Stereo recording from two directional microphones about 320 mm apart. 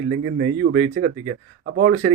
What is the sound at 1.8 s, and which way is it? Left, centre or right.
Speech, right.